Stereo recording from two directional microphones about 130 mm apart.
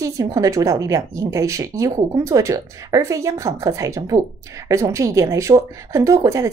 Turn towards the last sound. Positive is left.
turn(degrees=-25)  # may be behind; listen again after turning